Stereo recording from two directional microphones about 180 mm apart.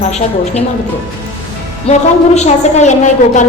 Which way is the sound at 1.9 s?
40° left (ahead or behind).